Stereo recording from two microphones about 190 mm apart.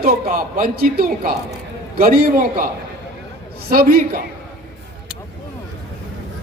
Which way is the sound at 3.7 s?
50° right (ahead or behind).